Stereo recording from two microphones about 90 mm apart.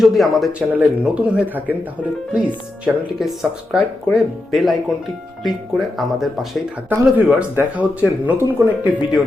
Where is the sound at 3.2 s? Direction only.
Centre (ahead or behind).